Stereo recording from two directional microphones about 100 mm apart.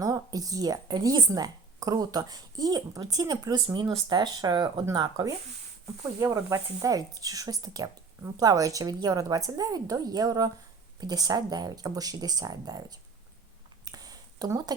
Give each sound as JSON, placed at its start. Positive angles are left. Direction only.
{"t": 0.0, "sound": "a woman's voice", "side_deg": -35}
{"t": 6.1, "sound": "speech", "side_deg": -30}
{"t": 13.8, "sound": "a sound", "side_deg": -40}